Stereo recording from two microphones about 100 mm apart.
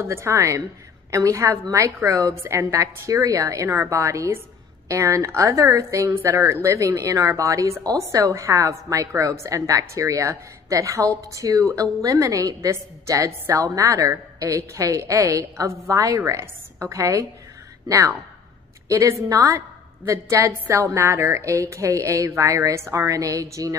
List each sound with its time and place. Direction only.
0.0 s a woman's voice: 25° right (ahead or behind)